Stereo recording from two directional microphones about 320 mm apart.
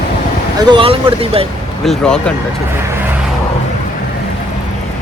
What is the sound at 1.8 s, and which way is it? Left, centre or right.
Speech, centre.